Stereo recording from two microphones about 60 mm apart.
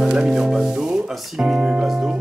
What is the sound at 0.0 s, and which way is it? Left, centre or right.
Music, centre.